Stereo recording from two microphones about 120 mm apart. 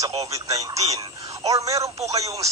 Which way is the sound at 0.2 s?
30° right (ahead or behind).